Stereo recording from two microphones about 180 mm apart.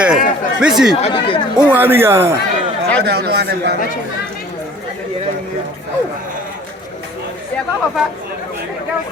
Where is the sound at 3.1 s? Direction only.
65° right (ahead or behind).